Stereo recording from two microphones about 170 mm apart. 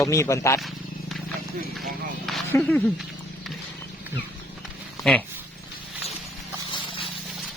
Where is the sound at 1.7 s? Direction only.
Centre (ahead or behind).